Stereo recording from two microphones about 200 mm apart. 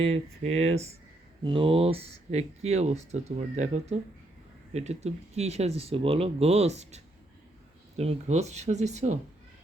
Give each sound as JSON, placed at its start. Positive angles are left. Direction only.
{"t": 0.0, "sound": "speech", "side_deg": -30}